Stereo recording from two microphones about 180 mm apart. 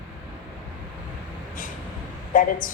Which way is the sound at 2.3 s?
45° left (ahead or behind).